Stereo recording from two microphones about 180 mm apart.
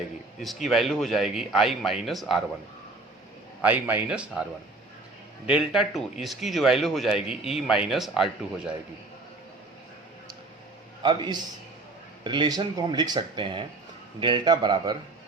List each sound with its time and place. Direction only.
0.4 s speech: centre (ahead or behind)
3.6 s a man's voice: 10° right (ahead or behind)
5.5 s speech: 5° right (ahead or behind)
11.0 s speech: 25° right (ahead or behind)